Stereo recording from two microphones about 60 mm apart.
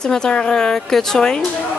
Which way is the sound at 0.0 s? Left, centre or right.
Centre.